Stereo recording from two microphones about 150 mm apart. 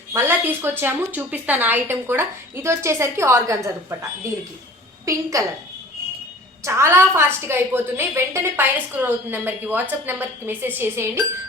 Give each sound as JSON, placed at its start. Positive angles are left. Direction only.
{"t": 0.1, "sound": "a woman's voice", "side_deg": -15}
{"t": 5.0, "sound": "a woman's voice", "side_deg": -20}
{"t": 6.7, "sound": "a woman's voice", "side_deg": -20}